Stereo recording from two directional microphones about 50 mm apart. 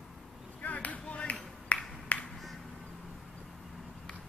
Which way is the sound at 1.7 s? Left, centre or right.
Left.